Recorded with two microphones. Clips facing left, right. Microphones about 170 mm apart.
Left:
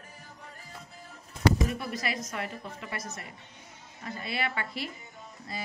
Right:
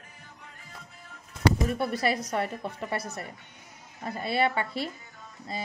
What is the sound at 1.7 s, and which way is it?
Speech, 35° right (ahead or behind).